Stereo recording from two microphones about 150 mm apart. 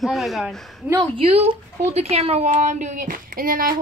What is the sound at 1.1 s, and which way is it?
A woman's voice, 45° right (ahead or behind).